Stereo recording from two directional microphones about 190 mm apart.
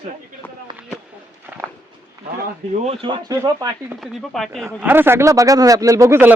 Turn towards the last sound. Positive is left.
turn(degrees=-10)  # may be behind; listen again after turning